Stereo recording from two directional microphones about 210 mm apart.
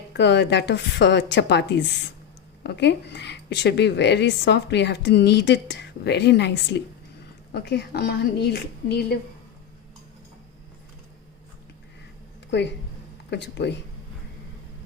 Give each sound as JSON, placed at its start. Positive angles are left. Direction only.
{"t": 0.1, "sound": "a woman's voice", "side_deg": 55}
{"t": 12.5, "sound": "a woman's voice", "side_deg": 55}